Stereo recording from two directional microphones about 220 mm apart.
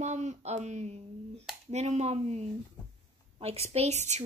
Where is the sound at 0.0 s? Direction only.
30° right (ahead or behind).